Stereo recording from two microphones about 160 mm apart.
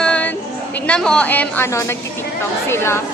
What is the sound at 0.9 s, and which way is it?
A woman's voice, 5° left (ahead or behind).